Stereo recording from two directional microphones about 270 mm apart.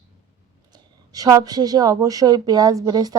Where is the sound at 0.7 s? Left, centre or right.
Centre.